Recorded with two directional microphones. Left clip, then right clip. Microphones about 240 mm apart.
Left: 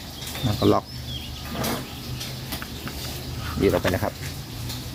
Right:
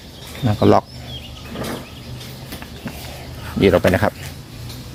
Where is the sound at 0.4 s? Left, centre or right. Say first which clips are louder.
Right 7 dB; right.